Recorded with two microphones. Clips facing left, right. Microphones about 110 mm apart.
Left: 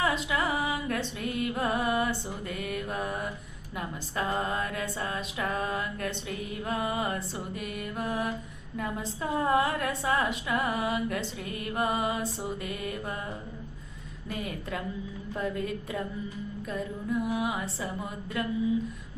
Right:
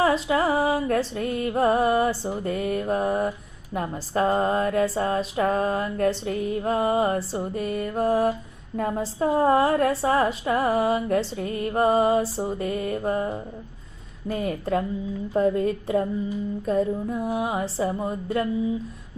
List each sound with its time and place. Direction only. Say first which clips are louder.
0.0 s a woman's voice: right 7 dB; 35° right (ahead or behind)